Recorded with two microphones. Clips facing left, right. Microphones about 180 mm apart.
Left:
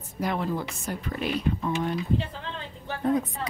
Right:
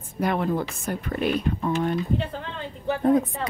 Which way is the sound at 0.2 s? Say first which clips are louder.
Right 4 dB; 55° right (ahead or behind).